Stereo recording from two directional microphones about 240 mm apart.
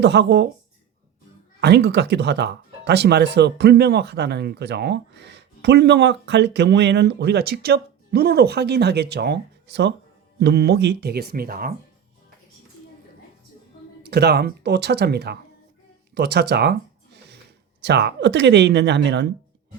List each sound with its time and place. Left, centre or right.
0.0 s speech: right
1.6 s speech: right
14.0 s speech: right